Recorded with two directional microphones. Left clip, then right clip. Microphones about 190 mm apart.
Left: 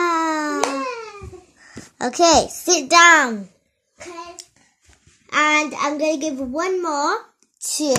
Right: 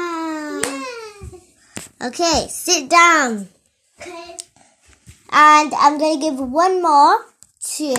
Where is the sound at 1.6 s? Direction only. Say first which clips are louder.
Left 2 dB; 15° left (ahead or behind).